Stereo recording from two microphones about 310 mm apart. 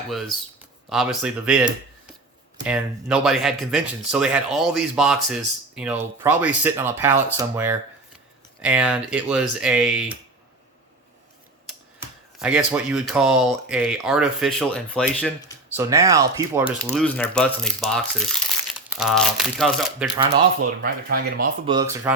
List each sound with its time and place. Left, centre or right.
0.1 s speech: centre
12.4 s speech: centre
15.7 s speech: centre
20.3 s speech: right
21.7 s speech: centre